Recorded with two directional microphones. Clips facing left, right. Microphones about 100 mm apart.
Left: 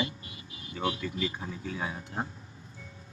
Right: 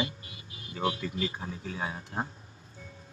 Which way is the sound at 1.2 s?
30° right (ahead or behind).